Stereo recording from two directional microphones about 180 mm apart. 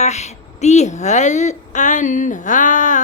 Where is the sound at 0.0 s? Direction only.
40° left (ahead or behind).